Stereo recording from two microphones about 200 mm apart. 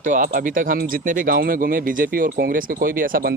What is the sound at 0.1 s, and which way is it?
Speech, 40° right (ahead or behind).